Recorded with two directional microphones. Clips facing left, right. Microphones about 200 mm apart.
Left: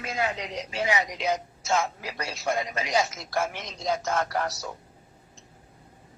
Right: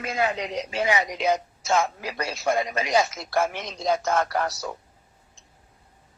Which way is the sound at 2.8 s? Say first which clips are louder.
Right 3 dB; 60° right (ahead or behind).